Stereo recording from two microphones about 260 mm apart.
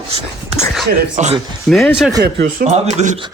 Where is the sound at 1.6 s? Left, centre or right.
Centre.